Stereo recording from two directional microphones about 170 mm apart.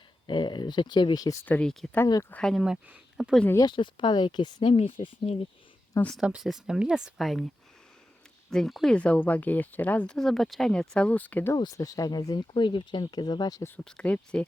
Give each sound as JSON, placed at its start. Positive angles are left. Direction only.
{"t": 0.3, "sound": "speech", "side_deg": 25}
{"t": 3.5, "sound": "speech", "side_deg": 25}
{"t": 5.9, "sound": "speech", "side_deg": 10}
{"t": 6.1, "sound": "speech", "side_deg": -5}
{"t": 8.4, "sound": "speech", "side_deg": 0}
{"t": 11.5, "sound": "speech", "side_deg": 25}